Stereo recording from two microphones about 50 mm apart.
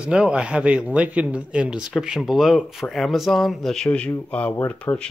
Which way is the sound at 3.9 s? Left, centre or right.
Left.